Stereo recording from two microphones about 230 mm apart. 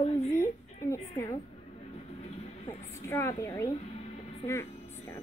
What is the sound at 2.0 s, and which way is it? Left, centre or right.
Train, left.